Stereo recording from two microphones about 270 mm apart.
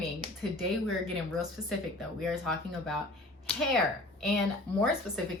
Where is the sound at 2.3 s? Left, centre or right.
Centre.